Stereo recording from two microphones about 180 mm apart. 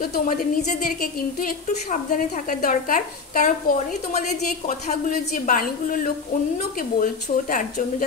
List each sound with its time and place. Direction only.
0.0 s a woman's voice: 55° left (ahead or behind)